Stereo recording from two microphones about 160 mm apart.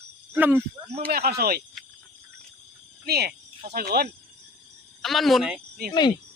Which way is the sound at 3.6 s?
75° right (ahead or behind).